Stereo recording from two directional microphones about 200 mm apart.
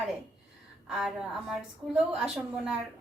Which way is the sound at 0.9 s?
5° right (ahead or behind).